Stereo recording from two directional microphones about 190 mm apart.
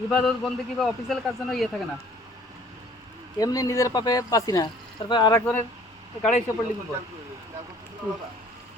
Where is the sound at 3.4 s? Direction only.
20° left (ahead or behind).